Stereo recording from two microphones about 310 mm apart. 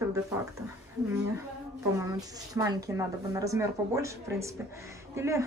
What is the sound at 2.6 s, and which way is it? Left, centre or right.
Speech, centre.